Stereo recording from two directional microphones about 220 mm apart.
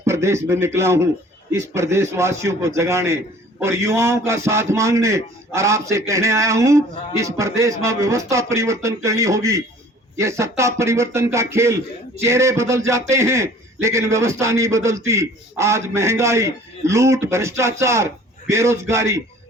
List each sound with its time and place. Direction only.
0.0 s a man's voice: 10° right (ahead or behind)